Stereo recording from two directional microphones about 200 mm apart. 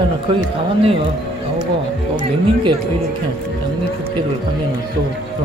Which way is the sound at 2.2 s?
25° right (ahead or behind).